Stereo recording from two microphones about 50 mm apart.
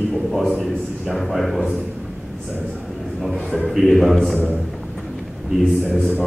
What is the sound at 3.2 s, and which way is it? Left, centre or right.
A man's voice, centre.